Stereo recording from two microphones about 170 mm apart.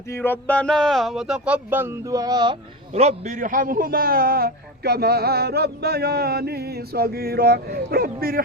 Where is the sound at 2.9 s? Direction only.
40° right (ahead or behind); by 8.4 s 60° right (ahead or behind).